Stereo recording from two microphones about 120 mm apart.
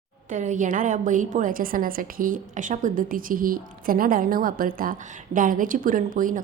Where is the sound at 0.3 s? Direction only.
90° right.